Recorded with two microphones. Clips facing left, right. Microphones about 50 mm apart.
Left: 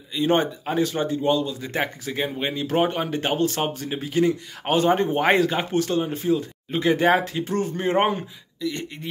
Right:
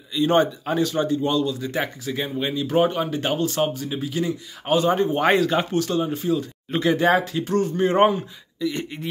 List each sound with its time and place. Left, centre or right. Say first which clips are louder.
0.1 s speech: right 2 dB; left
8.5 s speech: right 3 dB; centre